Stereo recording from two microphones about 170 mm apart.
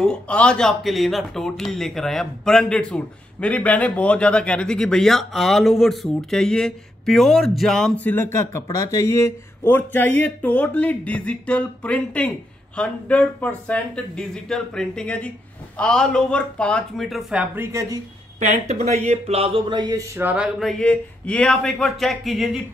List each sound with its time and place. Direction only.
0.0 s speech: 5° left (ahead or behind)
17.6 s speech: 20° right (ahead or behind)
18.4 s speech: 45° right (ahead or behind); by 22.6 s centre (ahead or behind)